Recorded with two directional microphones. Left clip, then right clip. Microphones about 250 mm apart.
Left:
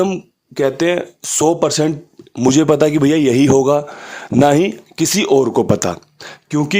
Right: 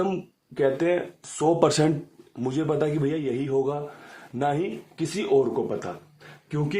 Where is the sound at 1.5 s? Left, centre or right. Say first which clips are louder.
Left 5 dB; centre.